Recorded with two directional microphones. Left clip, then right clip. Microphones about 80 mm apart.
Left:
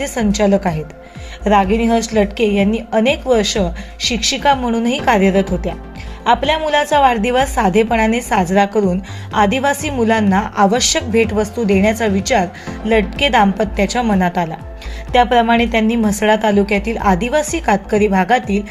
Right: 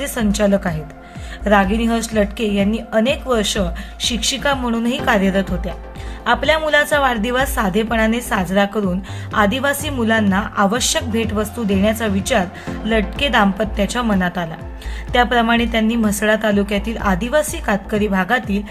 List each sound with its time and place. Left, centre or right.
0.0 s a woman's voice: centre
10.2 s a woman's voice: left
14.2 s a woman's voice: left